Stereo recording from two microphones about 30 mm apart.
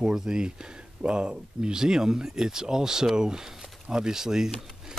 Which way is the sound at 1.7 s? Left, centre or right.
Centre.